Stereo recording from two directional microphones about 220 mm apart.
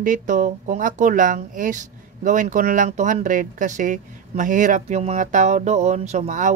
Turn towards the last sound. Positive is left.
turn(degrees=-35)  # may be behind; listen again after turning